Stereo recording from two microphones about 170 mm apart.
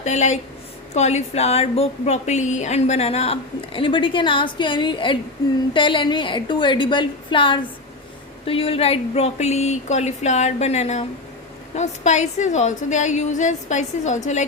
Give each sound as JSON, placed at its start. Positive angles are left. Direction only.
{"t": 0.0, "sound": "a woman's voice", "side_deg": 40}